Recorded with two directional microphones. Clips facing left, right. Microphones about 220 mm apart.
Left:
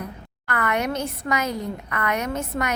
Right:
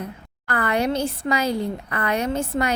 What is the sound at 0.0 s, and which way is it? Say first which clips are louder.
A woman's voice: right 1 dB; 30° right (ahead or behind).